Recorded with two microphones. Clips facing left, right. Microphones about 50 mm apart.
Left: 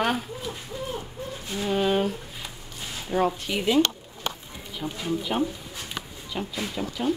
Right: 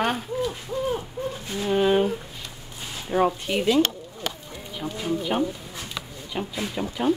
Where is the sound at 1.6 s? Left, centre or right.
Centre.